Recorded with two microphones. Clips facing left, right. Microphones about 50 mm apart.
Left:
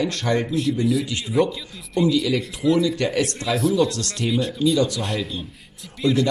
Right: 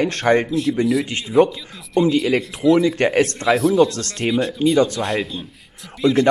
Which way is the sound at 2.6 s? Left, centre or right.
Centre.